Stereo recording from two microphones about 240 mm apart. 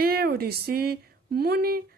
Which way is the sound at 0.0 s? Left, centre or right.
Right.